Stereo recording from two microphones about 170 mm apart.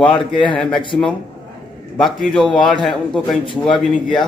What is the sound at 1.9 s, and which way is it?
Speech, centre (ahead or behind).